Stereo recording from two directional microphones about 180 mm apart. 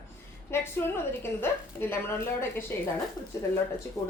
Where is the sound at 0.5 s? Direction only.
15° left (ahead or behind).